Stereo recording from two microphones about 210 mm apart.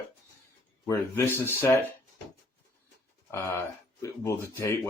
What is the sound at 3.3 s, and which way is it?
Speech, 15° left (ahead or behind).